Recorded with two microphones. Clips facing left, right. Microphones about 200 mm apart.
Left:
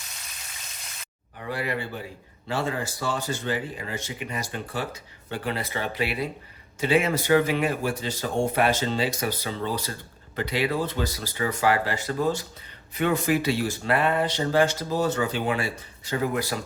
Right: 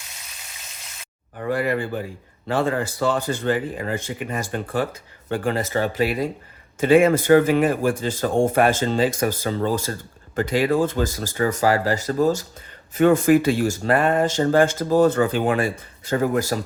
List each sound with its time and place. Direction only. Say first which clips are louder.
1.4 s speech: right 7 dB; 50° right (ahead or behind)